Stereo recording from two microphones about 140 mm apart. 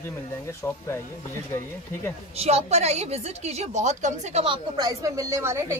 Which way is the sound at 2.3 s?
50° right (ahead or behind).